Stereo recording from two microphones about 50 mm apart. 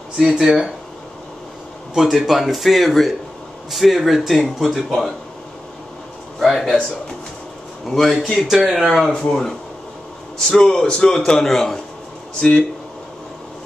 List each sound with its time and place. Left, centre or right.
0.2 s speech: centre
2.0 s speech: centre
6.4 s speech: centre
7.9 s a man's voice: centre
12.4 s speech: centre